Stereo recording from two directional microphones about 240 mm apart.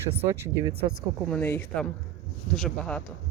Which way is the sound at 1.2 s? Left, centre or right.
Centre.